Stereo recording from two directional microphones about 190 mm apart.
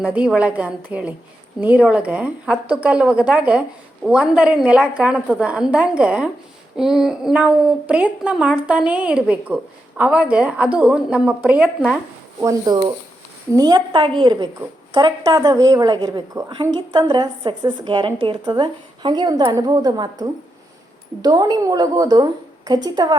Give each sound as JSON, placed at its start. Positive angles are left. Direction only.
{"t": 0.0, "sound": "a woman's voice", "side_deg": -5}
{"t": 12.4, "sound": "a woman's voice", "side_deg": -20}
{"t": 21.2, "sound": "a woman's voice", "side_deg": -20}